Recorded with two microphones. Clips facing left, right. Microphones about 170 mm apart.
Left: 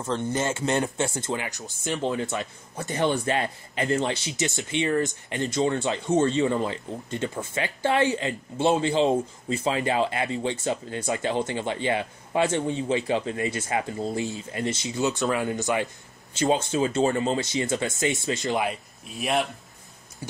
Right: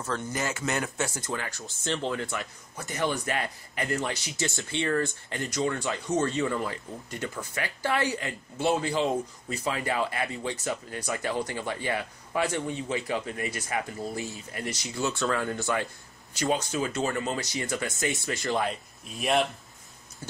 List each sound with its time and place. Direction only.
0.0 s speech: 25° left (ahead or behind)
18.7 s speech: centre (ahead or behind)